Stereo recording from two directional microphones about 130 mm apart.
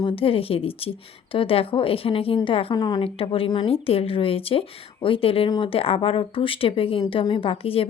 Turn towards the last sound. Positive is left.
turn(degrees=45)  # may be behind; listen again after turning